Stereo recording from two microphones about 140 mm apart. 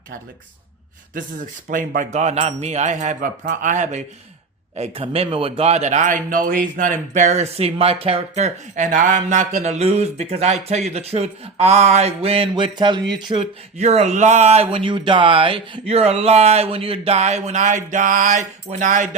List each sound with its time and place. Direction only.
1.7 s speech: 70° right (ahead or behind)
4.8 s speech: 45° right (ahead or behind)
13.3 s speech: 45° right (ahead or behind); by 19.0 s 65° right (ahead or behind)